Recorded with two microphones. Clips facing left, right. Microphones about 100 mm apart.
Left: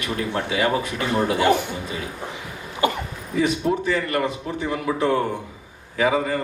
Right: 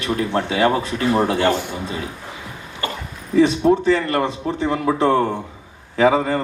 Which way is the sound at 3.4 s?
25° right (ahead or behind).